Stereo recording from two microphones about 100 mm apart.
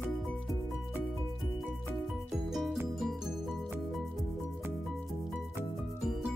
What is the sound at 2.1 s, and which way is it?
Music, 5° right (ahead or behind).